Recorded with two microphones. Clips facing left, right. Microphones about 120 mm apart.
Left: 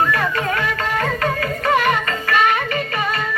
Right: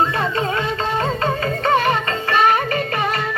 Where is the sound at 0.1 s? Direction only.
25° right (ahead or behind).